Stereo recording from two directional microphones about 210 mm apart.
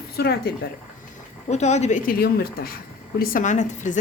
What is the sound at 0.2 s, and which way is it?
Speech, 50° left (ahead or behind).